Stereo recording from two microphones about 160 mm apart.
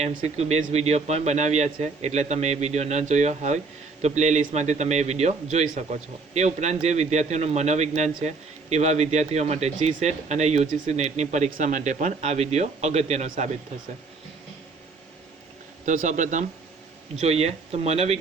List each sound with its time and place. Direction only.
0.3 s speech: 45° right (ahead or behind)
15.9 s speech: 50° right (ahead or behind)